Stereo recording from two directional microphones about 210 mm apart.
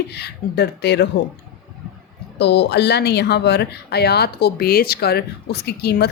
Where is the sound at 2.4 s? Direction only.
55° left (ahead or behind).